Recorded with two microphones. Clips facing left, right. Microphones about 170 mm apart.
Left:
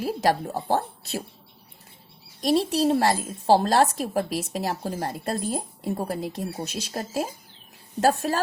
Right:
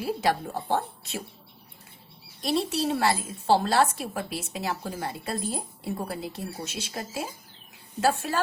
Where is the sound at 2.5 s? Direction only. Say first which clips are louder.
Left 5 dB; 40° left (ahead or behind).